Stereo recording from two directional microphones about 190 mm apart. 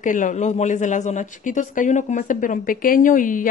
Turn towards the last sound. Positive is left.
turn(degrees=45)  # may be behind; listen again after turning